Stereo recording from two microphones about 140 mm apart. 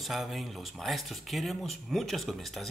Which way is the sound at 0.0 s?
Centre (ahead or behind).